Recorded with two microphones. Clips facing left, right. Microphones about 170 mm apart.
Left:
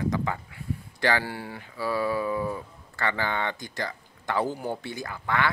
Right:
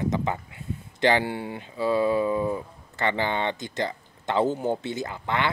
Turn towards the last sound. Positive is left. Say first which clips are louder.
# right 1 dB
turn(degrees=-20)  # may be behind; listen again after turning